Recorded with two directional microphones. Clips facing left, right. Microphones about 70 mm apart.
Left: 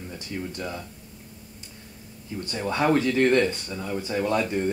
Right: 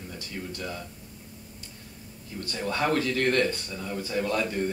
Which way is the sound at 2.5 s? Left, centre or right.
Left.